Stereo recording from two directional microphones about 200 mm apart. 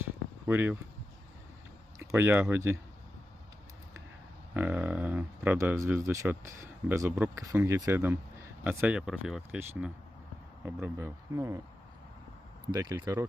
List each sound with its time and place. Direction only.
0.0 s a sound: 10° right (ahead or behind)
2.0 s speech: 10° right (ahead or behind)
4.5 s speech: 10° right (ahead or behind)
12.7 s speech: 20° right (ahead or behind)